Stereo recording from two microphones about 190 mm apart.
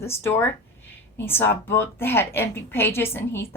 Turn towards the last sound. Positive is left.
turn(degrees=10)  # may be behind; listen again after turning